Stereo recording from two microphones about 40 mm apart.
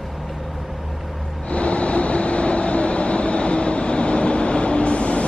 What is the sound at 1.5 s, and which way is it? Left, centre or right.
Vehicle, left.